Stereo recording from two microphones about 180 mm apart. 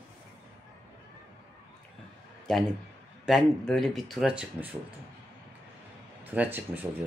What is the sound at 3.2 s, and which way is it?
Speech, centre (ahead or behind).